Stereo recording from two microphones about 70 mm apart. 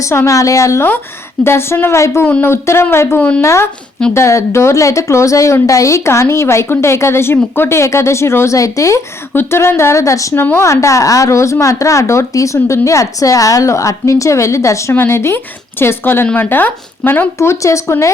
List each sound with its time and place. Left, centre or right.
0.0 s a woman's voice: left
1.5 s a woman's voice: left
3.2 s speech: centre
3.4 s a woman's voice: left
8.5 s a woman's voice: left
9.3 s a woman's voice: left
10.3 s a woman's voice: left
10.7 s a woman's voice: left
17.3 s a woman's voice: left